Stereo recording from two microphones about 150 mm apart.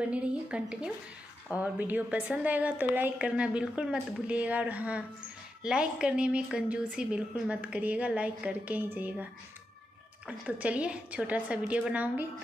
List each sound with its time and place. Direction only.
0.1 s a woman's voice: 5° right (ahead or behind)